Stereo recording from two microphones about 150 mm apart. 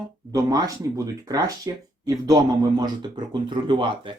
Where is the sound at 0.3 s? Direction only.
25° right (ahead or behind).